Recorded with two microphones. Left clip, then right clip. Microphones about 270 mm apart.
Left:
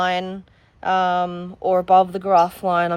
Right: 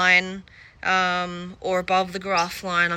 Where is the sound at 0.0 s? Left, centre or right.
Centre.